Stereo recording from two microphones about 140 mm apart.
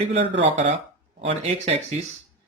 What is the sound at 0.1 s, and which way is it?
Speech, 50° right (ahead or behind).